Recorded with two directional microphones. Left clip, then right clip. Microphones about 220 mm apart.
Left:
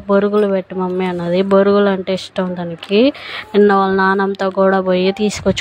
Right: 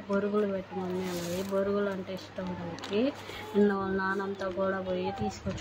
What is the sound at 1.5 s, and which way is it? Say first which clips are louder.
A woman's voice: left 18 dB; 45° left (ahead or behind).